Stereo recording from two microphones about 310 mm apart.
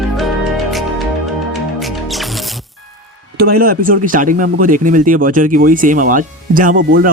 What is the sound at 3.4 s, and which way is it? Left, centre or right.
Speech, right.